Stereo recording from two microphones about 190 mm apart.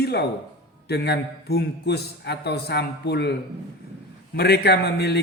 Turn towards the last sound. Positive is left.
turn(degrees=60)  # may be behind; listen again after turning